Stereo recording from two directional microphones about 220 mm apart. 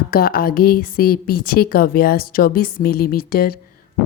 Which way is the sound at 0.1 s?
40° left (ahead or behind).